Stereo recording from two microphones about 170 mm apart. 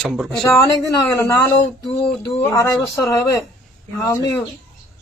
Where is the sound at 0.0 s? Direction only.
Centre (ahead or behind).